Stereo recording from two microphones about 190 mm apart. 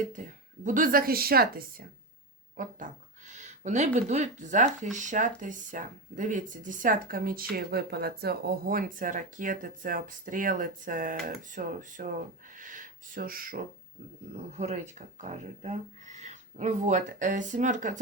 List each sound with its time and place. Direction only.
0.2 s speech: 40° right (ahead or behind)
14.5 s speech: 35° right (ahead or behind)